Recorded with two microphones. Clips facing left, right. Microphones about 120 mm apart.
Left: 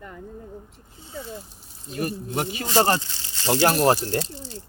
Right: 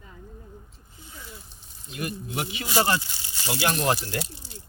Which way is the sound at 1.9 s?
40° left (ahead or behind).